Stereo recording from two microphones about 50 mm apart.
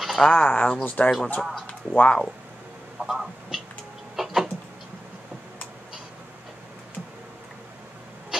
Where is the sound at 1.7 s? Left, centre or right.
Left.